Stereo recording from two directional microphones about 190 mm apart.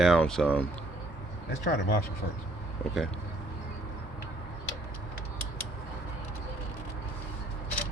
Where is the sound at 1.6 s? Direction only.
50° left (ahead or behind).